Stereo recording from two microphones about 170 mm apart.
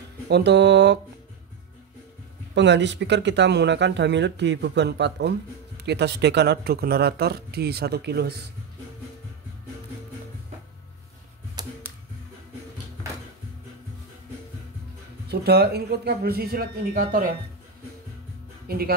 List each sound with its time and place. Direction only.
0.3 s speech: 80° right
2.5 s speech: 90° right; by 8.4 s 75° right (ahead or behind)
11.6 s a sound: 25° right (ahead or behind)
15.2 s speech: 70° right (ahead or behind)
18.7 s speech: 65° right (ahead or behind)